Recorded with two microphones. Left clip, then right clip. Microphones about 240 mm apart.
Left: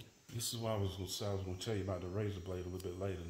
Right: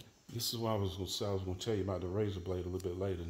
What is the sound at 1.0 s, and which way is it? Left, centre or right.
Speech, right.